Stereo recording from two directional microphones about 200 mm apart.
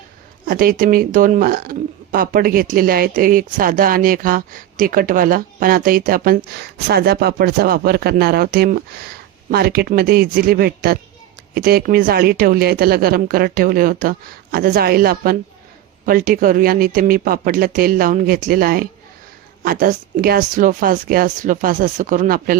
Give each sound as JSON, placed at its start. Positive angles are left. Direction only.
{"t": 0.4, "sound": "speech", "side_deg": -45}